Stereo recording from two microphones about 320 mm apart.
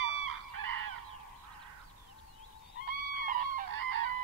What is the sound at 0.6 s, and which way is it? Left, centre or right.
Fowl, right.